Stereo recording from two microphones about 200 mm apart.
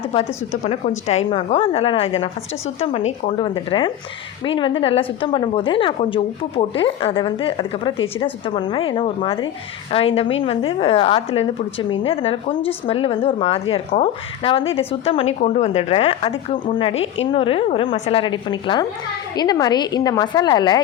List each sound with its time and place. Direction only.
0.5 s a woman's voice: 35° left (ahead or behind)